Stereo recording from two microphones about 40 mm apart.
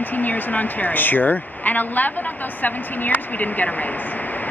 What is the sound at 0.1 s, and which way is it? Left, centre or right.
Speech, left.